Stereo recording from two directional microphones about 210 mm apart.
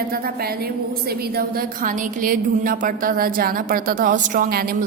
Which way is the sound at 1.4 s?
45° right (ahead or behind).